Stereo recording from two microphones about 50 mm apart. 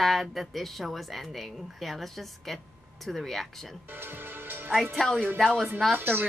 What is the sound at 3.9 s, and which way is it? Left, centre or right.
Music, right.